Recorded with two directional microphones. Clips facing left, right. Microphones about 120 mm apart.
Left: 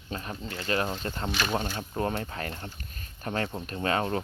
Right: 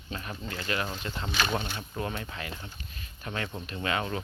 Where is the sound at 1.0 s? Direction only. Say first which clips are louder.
Left 1 dB; 45° left (ahead or behind).